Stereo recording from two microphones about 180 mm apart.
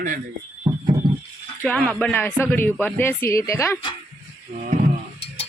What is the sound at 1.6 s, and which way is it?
Speech, 10° left (ahead or behind).